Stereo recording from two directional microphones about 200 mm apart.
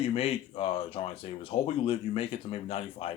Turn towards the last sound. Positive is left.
turn(degrees=30)  # may be behind; listen again after turning